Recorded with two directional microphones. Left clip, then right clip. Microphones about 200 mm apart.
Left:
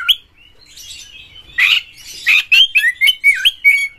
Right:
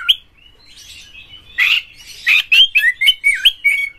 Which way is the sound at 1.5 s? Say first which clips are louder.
Left 2 dB; 25° left (ahead or behind).